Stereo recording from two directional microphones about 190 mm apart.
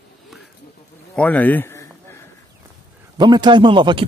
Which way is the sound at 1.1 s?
5° left (ahead or behind).